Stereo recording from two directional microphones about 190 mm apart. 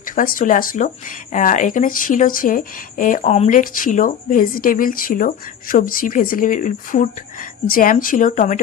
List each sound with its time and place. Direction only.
0.0 s speech: 45° left (ahead or behind)